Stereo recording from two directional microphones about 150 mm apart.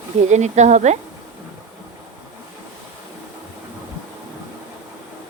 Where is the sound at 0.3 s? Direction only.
50° right (ahead or behind).